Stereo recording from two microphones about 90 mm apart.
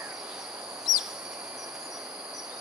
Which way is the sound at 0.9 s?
Centre (ahead or behind).